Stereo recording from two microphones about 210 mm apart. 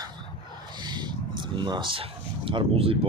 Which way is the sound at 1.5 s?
20° right (ahead or behind).